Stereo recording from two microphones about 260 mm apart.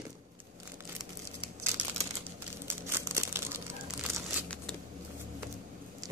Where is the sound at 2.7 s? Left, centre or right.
Centre.